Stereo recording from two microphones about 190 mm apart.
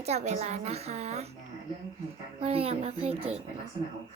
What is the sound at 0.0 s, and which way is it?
Speech, 35° right (ahead or behind).